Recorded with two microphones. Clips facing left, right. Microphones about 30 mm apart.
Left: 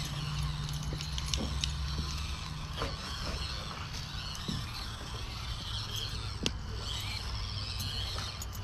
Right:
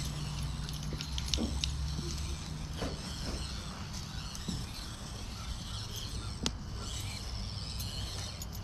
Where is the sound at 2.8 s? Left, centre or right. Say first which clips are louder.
Left 2 dB; left.